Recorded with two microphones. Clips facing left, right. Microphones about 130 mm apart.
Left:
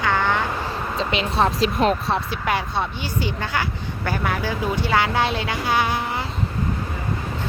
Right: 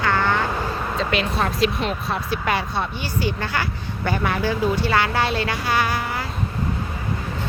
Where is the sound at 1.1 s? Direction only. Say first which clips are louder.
Left 4 dB; 25° left (ahead or behind).